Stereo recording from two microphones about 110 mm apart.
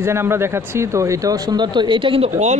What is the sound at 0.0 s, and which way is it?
Speech, 20° right (ahead or behind).